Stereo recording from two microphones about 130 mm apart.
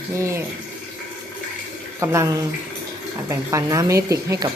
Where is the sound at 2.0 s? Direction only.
20° right (ahead or behind).